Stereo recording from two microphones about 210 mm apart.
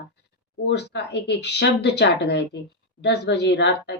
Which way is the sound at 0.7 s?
55° left (ahead or behind).